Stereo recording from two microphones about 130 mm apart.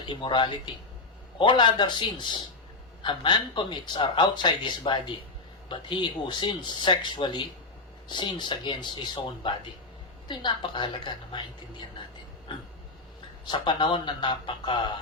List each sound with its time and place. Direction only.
0.0 s speech: 35° left (ahead or behind)
13.5 s speech: 35° left (ahead or behind)